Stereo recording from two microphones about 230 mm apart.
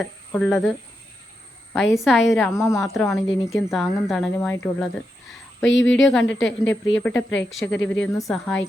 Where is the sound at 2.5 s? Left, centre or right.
Centre.